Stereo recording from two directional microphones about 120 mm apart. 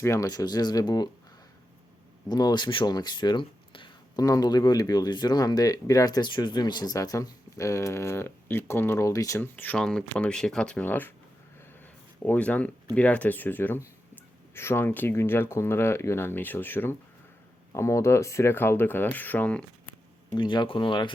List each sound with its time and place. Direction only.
0.0 s speech: 25° left (ahead or behind)
2.3 s speech: 35° left (ahead or behind)
9.4 s speech: 15° left (ahead or behind)
9.7 s speech: 5° left (ahead or behind)
12.2 s speech: 10° left (ahead or behind)
20.3 s speech: 40° left (ahead or behind)